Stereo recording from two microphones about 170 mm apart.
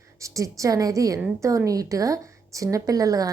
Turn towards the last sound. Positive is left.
turn(degrees=-20)  # may be behind; listen again after turning